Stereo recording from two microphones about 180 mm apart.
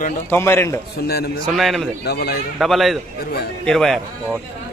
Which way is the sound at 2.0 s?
60° left (ahead or behind).